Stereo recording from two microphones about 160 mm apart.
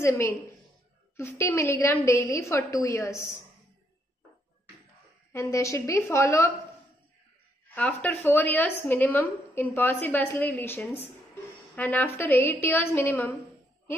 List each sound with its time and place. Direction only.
0.0 s a woman's voice: 20° left (ahead or behind)
5.3 s a woman's voice: 15° left (ahead or behind)
7.6 s a woman's voice: 10° left (ahead or behind)